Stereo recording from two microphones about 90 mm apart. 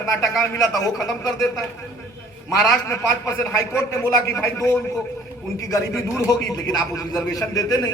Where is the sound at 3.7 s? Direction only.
35° left (ahead or behind).